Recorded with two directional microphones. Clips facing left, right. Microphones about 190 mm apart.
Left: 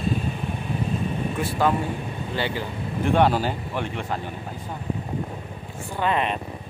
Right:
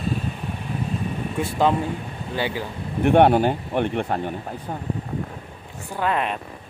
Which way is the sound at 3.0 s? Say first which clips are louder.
Right 5 dB; 60° right (ahead or behind).